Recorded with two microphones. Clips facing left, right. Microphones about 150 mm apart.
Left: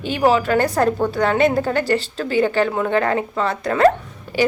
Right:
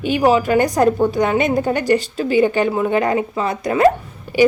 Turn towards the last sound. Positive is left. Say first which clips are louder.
# right 5 dB
turn(degrees=-15)  # may be behind; listen again after turning